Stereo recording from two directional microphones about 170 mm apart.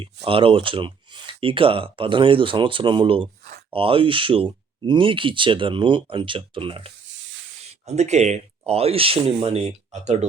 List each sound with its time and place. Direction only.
0.3 s speech: 30° right (ahead or behind)